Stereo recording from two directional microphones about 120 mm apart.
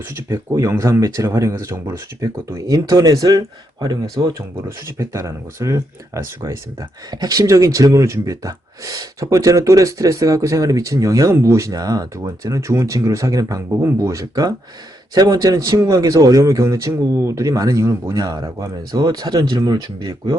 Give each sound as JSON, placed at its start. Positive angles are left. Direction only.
{"t": 0.1, "sound": "speech", "side_deg": -25}